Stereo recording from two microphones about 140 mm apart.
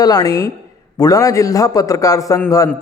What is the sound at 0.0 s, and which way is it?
A man's voice, 25° left (ahead or behind).